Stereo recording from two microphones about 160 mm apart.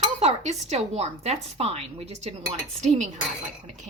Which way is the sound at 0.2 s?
45° right (ahead or behind).